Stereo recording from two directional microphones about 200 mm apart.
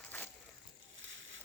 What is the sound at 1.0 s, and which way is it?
Boat, 70° right (ahead or behind).